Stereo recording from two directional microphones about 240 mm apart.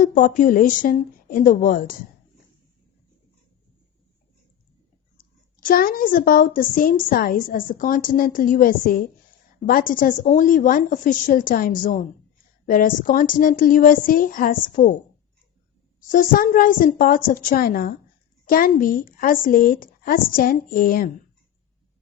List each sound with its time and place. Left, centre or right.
0.0 s a woman's voice: left
5.1 s a woman's voice: left
16.0 s a woman's voice: left